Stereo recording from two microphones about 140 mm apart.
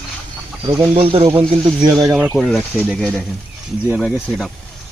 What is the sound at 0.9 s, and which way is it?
Speech, 40° right (ahead or behind).